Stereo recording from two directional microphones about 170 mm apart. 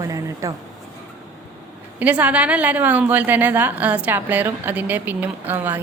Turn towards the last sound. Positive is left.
turn(degrees=-10)  # may be behind; listen again after turning